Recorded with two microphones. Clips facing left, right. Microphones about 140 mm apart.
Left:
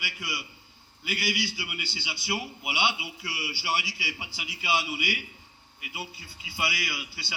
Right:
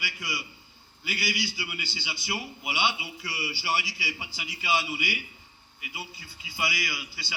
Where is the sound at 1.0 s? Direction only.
60° left (ahead or behind).